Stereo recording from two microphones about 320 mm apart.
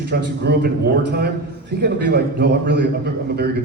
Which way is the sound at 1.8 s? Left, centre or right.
Right.